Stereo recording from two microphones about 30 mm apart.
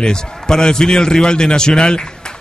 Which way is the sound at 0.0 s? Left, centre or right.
Left.